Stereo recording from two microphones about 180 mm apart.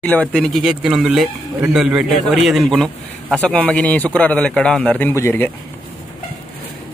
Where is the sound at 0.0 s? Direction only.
5° left (ahead or behind).